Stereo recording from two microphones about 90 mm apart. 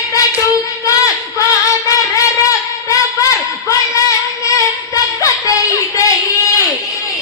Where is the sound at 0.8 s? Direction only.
40° left (ahead or behind).